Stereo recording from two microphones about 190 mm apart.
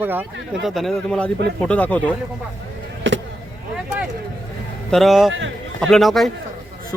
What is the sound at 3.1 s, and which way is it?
Vehicle, 80° right.